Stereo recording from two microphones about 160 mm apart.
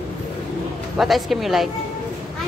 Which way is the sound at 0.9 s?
Centre (ahead or behind).